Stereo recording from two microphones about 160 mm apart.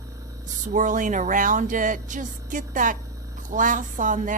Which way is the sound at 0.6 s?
55° right (ahead or behind).